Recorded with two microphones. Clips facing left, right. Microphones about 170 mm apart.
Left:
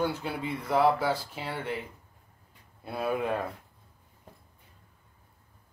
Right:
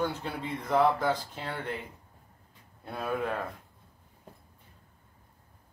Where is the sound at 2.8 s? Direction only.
10° left (ahead or behind).